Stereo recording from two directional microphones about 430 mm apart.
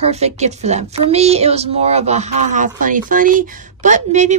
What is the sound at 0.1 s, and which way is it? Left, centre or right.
Speech, centre.